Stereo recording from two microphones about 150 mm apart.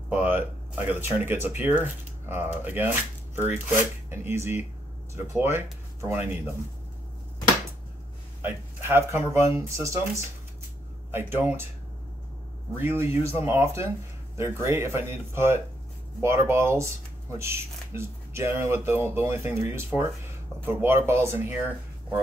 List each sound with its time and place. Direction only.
0.1 s speech: 10° right (ahead or behind)
8.4 s speech: 15° right (ahead or behind)
12.7 s speech: 15° right (ahead or behind)